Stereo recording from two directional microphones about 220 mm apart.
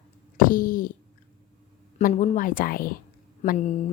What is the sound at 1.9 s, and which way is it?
Speech, 30° left (ahead or behind).